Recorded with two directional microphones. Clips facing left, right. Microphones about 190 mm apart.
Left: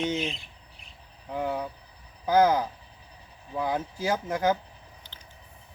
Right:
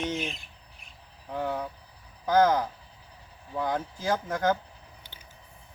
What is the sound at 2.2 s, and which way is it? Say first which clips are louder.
Speech: left 1 dB; 10° left (ahead or behind).